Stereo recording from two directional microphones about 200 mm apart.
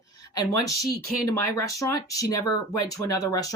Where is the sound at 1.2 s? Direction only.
15° left (ahead or behind).